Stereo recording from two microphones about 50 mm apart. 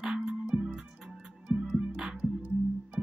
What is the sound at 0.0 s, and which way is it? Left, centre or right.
Music, centre.